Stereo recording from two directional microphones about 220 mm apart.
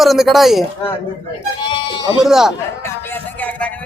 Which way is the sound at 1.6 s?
20° left (ahead or behind).